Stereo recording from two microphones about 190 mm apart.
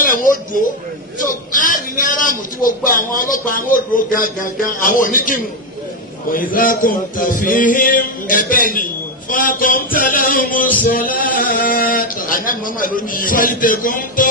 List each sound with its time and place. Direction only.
0.0 s speech: 45° left (ahead or behind)
1.2 s music: 45° left (ahead or behind)